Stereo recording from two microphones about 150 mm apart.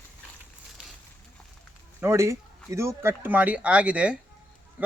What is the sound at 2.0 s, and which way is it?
Speech, 20° right (ahead or behind).